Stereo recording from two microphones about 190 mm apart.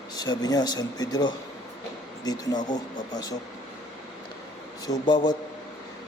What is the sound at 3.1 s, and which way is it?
Speech, 20° left (ahead or behind).